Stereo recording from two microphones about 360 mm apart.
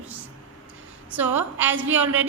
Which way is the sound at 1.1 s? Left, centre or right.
Centre.